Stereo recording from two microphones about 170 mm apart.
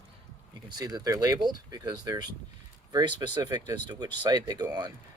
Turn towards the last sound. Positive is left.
turn(degrees=-25)  # may be behind; listen again after turning